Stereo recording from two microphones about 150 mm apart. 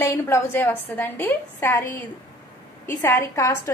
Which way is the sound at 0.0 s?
15° left (ahead or behind).